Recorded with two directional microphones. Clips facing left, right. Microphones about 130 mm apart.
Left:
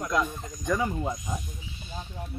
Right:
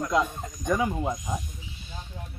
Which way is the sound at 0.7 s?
10° right (ahead or behind).